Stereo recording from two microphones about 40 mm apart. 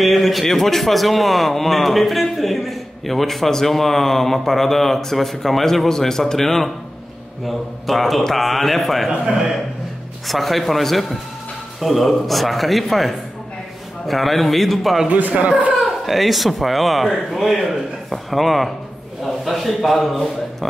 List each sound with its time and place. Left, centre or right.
0.0 s a man's voice: centre
10.2 s a man's voice: centre
15.1 s speech: right
15.7 s a man's voice: centre